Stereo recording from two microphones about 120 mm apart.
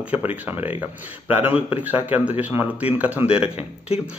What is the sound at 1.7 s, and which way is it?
Speech, 15° right (ahead or behind).